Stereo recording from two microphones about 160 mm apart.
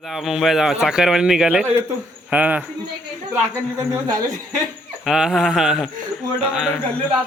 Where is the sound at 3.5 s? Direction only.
20° right (ahead or behind).